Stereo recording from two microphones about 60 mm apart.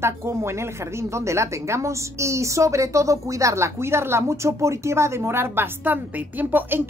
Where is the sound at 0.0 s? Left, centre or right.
Right.